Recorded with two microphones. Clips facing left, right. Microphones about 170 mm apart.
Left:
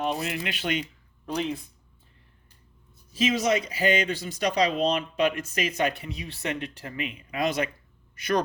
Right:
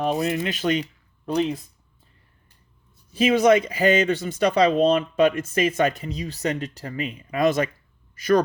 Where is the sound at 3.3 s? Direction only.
55° right (ahead or behind).